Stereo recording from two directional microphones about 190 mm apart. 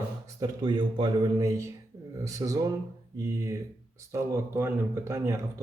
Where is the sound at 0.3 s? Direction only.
20° right (ahead or behind).